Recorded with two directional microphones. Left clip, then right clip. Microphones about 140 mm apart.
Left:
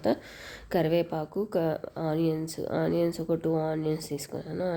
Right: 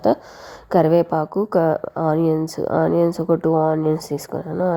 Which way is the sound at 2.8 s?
40° right (ahead or behind).